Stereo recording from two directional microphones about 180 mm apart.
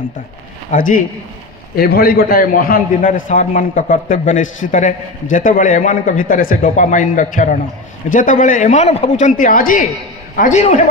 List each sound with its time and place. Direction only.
0.7 s a man's voice: 50° left (ahead or behind)
9.2 s a man's voice: 50° left (ahead or behind)